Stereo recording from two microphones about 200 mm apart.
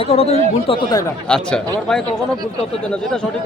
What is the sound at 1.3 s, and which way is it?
A man's voice, 5° left (ahead or behind).